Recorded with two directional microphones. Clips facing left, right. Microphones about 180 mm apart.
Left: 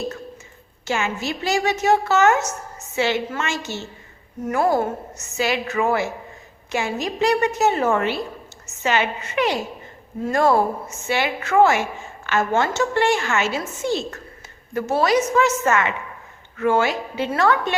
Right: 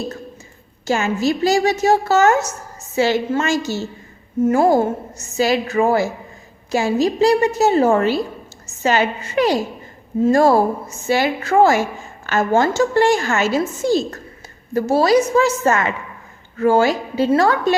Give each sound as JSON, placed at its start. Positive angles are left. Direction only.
{"t": 0.9, "sound": "a woman's voice", "side_deg": -35}